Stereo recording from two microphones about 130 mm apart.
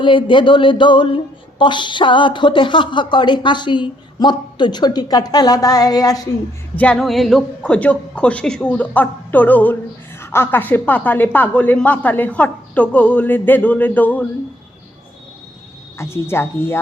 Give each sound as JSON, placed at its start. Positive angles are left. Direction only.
{"t": 0.0, "sound": "speech", "side_deg": 40}
{"t": 6.7, "sound": "a woman's voice", "side_deg": 5}
{"t": 16.0, "sound": "a woman's voice", "side_deg": 20}